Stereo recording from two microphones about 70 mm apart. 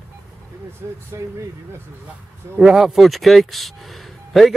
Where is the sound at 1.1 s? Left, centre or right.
Right.